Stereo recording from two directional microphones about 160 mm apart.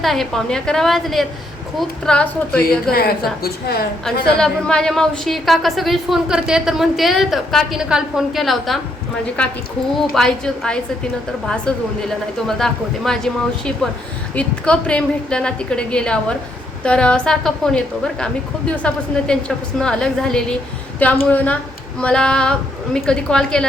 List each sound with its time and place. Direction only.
0.0 s a woman's voice: centre (ahead or behind)
3.4 s a woman's voice: 75° left (ahead or behind)
4.0 s a woman's voice: 5° left (ahead or behind)